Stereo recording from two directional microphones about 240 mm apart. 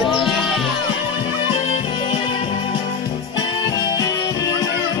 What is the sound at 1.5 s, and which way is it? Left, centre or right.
Music, left.